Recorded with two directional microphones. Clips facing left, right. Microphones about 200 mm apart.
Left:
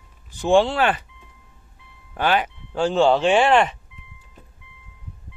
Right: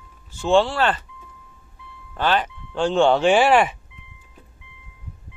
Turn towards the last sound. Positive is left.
turn(degrees=-5)  # may be behind; listen again after turning